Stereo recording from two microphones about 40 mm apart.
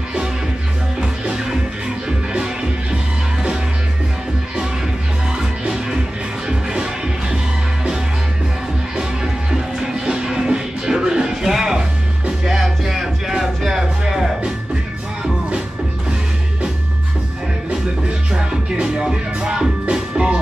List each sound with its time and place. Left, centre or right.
1.3 s music: centre
5.4 s music: centre
8.9 s music: centre
18.3 s music: right